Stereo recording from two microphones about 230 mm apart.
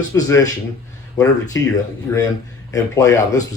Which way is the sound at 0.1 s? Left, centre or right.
Centre.